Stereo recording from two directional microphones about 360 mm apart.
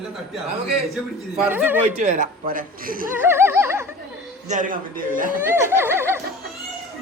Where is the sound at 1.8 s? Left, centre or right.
Centre.